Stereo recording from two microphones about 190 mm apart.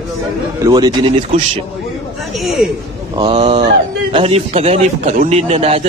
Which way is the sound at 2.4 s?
Centre (ahead or behind).